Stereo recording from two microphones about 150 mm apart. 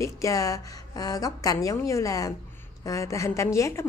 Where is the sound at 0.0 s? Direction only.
20° left (ahead or behind).